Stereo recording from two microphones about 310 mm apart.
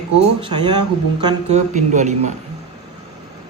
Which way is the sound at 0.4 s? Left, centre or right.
Centre.